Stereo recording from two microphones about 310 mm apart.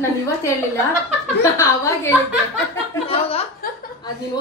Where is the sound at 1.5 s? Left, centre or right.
Centre.